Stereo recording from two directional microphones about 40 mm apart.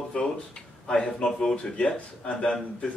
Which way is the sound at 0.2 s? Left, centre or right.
Left.